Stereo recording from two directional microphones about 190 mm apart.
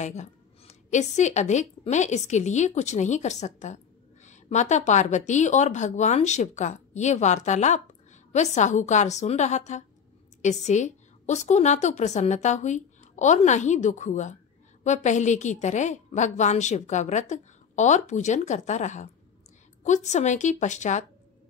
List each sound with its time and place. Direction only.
0.0 s a woman's voice: 35° left (ahead or behind)